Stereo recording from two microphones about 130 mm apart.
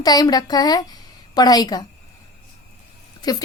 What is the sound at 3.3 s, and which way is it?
Speech, 30° left (ahead or behind).